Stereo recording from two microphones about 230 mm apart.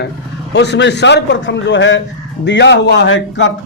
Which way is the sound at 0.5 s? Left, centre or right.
Left.